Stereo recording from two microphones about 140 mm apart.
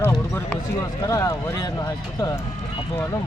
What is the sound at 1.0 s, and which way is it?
Speech, 25° left (ahead or behind).